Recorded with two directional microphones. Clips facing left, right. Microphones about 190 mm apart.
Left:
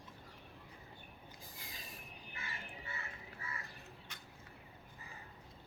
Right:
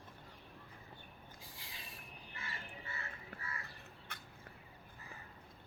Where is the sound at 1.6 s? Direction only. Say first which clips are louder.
Left 3 dB; 45° left (ahead or behind).